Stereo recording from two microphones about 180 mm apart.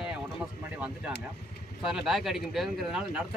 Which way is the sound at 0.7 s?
10° right (ahead or behind).